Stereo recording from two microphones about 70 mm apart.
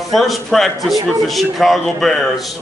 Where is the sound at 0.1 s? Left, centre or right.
Centre.